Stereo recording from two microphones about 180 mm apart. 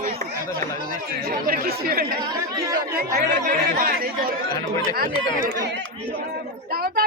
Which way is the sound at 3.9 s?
55° right (ahead or behind).